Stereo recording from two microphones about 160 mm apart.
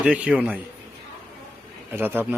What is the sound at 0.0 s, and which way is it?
Speech, 5° right (ahead or behind).